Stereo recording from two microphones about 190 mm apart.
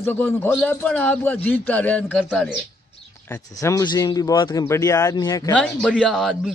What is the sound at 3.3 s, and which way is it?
Speech, 20° left (ahead or behind).